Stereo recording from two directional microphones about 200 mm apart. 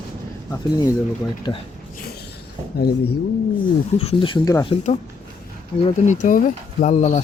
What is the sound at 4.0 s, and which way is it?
Speech, 30° left (ahead or behind).